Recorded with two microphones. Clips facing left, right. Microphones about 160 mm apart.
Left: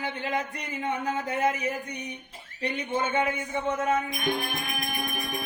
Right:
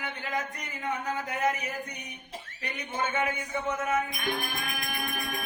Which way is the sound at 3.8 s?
25° left (ahead or behind).